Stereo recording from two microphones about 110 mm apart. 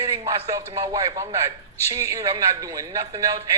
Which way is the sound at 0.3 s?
30° right (ahead or behind).